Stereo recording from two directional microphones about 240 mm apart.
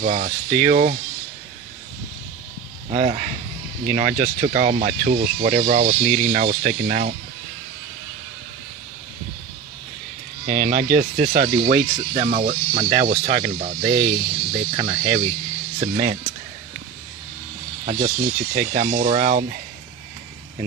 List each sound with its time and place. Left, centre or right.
0.0 s speech: right
2.9 s speech: right
10.4 s speech: right
17.8 s speech: right